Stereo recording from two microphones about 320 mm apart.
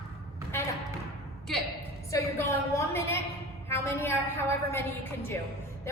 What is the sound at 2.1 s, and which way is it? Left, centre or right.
A woman's voice, centre.